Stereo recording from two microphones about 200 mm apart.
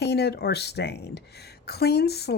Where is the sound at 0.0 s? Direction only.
55° left (ahead or behind).